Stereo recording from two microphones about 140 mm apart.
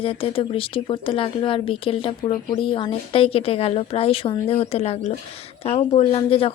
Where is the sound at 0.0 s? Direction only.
40° left (ahead or behind).